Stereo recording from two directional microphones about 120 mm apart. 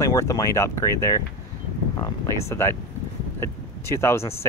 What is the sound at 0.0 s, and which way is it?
Speech, 25° left (ahead or behind).